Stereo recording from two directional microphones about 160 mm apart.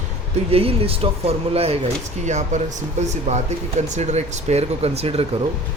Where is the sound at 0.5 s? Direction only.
35° right (ahead or behind).